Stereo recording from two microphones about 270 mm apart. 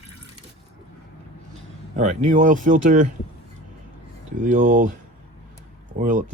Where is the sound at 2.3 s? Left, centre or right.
Right.